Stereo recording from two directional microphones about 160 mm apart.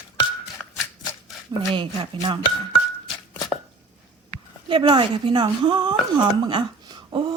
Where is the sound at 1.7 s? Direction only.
30° right (ahead or behind).